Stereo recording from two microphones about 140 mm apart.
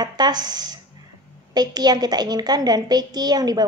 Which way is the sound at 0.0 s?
30° right (ahead or behind).